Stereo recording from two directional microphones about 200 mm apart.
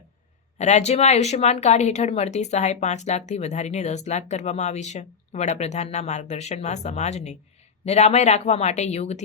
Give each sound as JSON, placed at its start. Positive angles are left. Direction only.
{"t": 0.6, "sound": "speech", "side_deg": 35}